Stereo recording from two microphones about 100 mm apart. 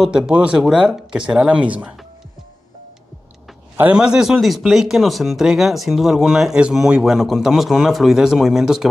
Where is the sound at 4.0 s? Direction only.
5° right (ahead or behind).